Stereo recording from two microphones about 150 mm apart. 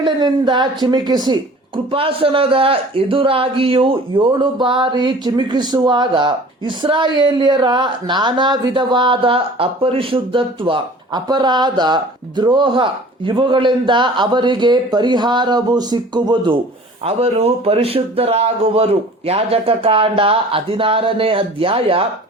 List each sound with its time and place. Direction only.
0.0 s speech: 30° right (ahead or behind)